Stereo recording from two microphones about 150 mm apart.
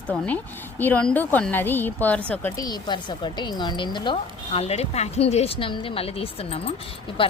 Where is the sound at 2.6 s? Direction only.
25° left (ahead or behind).